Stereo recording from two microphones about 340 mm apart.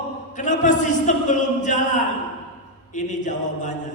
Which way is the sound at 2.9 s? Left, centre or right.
Left.